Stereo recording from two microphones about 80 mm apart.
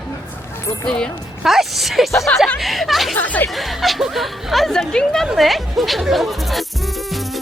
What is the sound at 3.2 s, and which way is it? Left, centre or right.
Speech, left.